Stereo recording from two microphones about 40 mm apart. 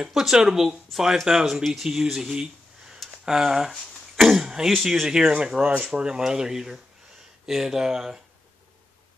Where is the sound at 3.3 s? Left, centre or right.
Centre.